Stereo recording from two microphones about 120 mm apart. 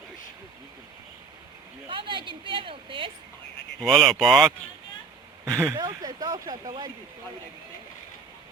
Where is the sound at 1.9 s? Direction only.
45° right (ahead or behind).